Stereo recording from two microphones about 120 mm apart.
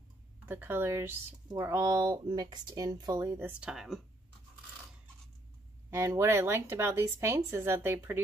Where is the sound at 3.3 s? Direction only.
20° right (ahead or behind).